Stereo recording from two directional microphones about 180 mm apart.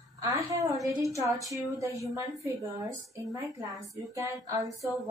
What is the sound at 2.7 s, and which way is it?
A woman's voice, 20° right (ahead or behind).